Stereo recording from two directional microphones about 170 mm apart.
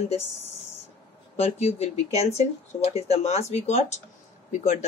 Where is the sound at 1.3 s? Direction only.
40° left (ahead or behind).